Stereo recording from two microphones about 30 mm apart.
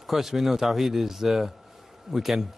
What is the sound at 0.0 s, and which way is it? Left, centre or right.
A man's voice, centre.